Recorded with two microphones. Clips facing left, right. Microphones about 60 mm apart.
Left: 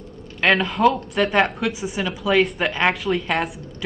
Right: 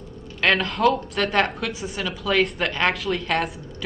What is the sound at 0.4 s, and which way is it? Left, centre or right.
A man's voice, centre.